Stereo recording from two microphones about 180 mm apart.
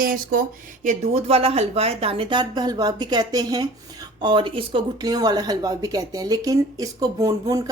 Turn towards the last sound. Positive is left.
turn(degrees=-20)  # may be behind; listen again after turning